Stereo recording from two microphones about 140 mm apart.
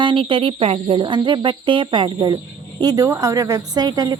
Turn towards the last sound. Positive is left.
turn(degrees=-30)  # may be behind; listen again after turning